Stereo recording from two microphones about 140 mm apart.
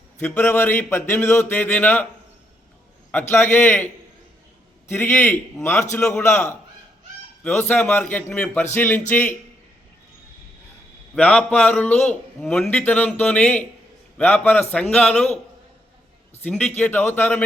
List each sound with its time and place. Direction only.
0.2 s speech: 10° left (ahead or behind)
3.1 s speech: 15° left (ahead or behind)
4.9 s speech: 15° left (ahead or behind)
11.1 s speech: 10° left (ahead or behind)
16.4 s speech: 10° left (ahead or behind)